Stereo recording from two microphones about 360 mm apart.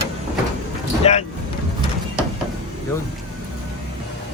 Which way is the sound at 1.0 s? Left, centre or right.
Centre.